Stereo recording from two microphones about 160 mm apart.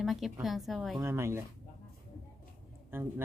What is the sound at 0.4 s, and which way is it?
Speech, centre (ahead or behind).